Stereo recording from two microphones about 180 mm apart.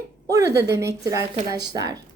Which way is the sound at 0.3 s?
15° right (ahead or behind).